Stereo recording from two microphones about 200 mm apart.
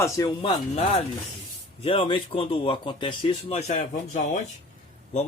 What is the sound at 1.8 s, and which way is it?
Speech, 25° left (ahead or behind).